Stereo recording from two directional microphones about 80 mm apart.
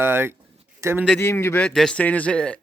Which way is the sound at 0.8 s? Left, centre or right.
Right.